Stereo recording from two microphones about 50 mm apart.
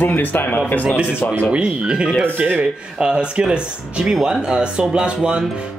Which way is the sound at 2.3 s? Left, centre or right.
Right.